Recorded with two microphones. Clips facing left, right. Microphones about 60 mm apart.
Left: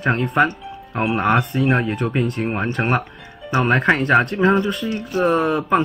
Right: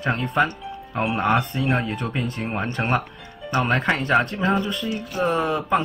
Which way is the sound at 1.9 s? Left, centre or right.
Centre.